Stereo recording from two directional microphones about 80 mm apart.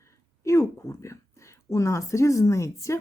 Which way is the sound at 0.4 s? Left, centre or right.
Left.